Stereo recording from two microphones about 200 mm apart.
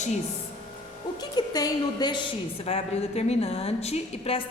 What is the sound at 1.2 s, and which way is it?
A woman's voice, 20° left (ahead or behind).